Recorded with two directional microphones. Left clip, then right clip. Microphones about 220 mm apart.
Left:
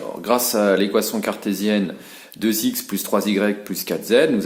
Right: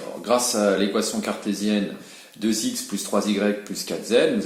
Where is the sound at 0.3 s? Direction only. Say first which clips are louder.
Left 3 dB; 45° left (ahead or behind).